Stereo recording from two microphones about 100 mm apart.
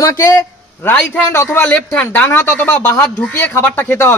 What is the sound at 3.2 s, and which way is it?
Speech, 15° left (ahead or behind).